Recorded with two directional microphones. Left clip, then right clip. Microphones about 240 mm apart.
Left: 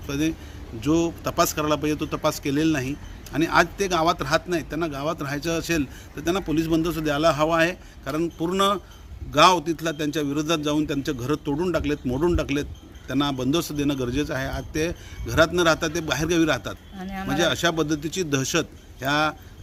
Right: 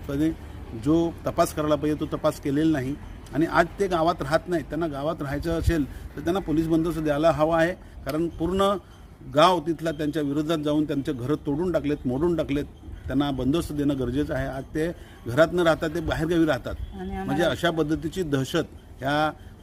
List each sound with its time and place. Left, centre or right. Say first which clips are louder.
0.1 s a man's voice: even; centre
17.0 s speech: even; left
17.2 s a man's voice: left 2 dB; centre